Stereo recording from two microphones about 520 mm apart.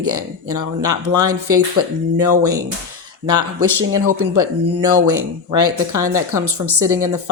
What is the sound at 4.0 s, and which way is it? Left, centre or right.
Speech, right.